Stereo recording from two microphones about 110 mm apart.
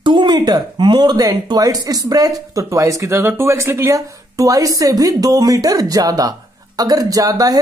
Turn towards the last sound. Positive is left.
turn(degrees=-35)  # may be behind; listen again after turning